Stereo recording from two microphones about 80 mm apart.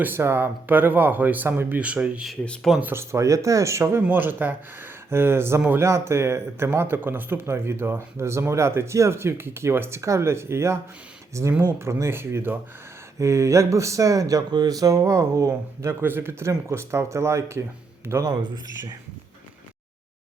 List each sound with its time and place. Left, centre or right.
0.0 s speech: right
1.8 s speech: centre
2.9 s speech: right
4.0 s speech: right
18.5 s speech: right